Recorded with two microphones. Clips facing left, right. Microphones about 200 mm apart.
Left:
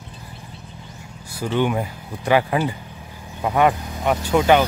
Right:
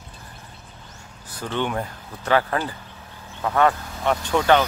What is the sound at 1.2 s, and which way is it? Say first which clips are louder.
Speech: left 5 dB; 10° left (ahead or behind).